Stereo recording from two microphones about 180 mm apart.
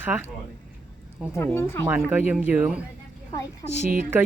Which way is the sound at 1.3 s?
15° left (ahead or behind).